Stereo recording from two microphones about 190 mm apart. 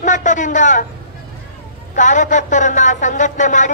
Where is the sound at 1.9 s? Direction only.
40° left (ahead or behind).